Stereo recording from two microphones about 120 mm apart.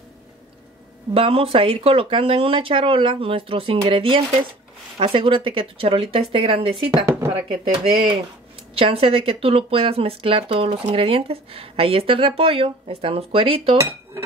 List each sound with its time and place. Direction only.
1.1 s speech: 50° right (ahead or behind)